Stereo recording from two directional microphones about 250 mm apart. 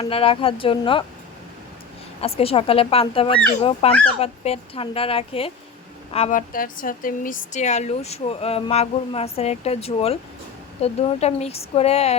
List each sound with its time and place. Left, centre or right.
0.0 s speech: left
2.2 s speech: left